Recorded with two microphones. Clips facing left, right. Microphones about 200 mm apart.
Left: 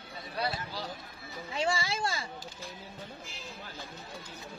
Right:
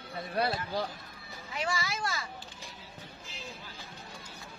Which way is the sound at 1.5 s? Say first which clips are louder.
Left 3 dB; 25° left (ahead or behind).